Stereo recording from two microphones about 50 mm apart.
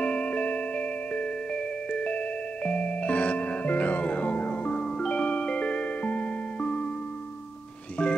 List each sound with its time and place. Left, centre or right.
0.0 s music: left
8.0 s music: left